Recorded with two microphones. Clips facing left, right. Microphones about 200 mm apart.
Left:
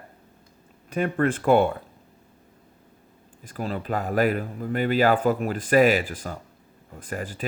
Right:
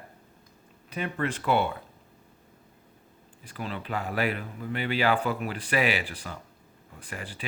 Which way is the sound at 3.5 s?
40° left (ahead or behind).